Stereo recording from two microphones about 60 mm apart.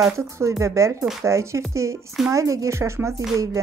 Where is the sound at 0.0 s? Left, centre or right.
Right.